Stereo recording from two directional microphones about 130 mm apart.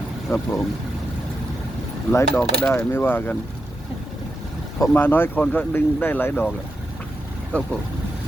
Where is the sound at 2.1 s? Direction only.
20° left (ahead or behind).